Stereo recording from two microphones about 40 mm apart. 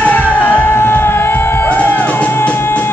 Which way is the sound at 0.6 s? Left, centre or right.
Left.